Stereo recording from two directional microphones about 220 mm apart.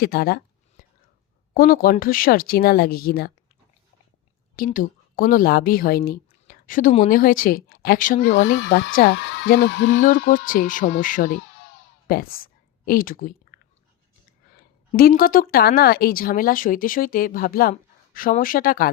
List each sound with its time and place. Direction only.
0.0 s speech: 45° left (ahead or behind)
1.5 s a woman's voice: 40° left (ahead or behind)
4.5 s a woman's voice: 40° left (ahead or behind)
8.3 s speech: 50° left (ahead or behind)
10.2 s a woman's voice: 40° left (ahead or behind)
11.3 s a sound: 60° left (ahead or behind)
12.0 s a sound: 40° left (ahead or behind)
14.5 s a woman's voice: 40° left (ahead or behind)